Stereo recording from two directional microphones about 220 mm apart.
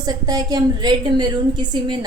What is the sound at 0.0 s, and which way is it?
A woman's voice, 15° right (ahead or behind).